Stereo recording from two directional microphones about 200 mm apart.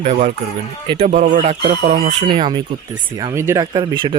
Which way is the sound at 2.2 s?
20° right (ahead or behind).